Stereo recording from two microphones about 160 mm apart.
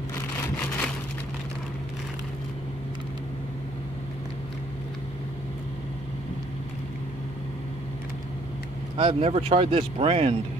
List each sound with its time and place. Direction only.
8.9 s speech: 35° right (ahead or behind)